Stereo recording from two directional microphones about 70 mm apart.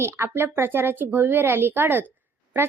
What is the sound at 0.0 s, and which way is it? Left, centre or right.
A woman's voice, right.